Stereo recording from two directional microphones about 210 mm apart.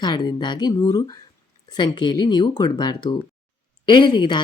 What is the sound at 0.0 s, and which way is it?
Speech, 20° left (ahead or behind).